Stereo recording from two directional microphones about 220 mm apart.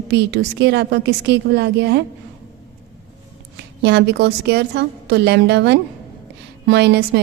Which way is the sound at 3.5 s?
50° right (ahead or behind).